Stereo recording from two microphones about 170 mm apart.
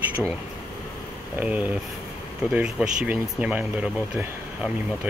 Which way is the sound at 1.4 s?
10° right (ahead or behind).